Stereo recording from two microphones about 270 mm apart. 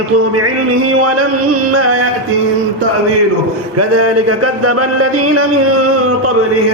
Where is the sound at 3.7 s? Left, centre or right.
Right.